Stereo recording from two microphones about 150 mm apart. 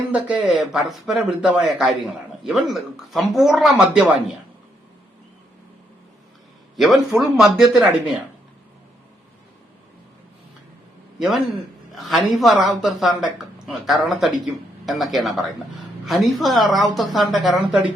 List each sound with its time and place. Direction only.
0.1 s speech: 10° right (ahead or behind)
6.7 s speech: centre (ahead or behind)
11.9 s speech: centre (ahead or behind)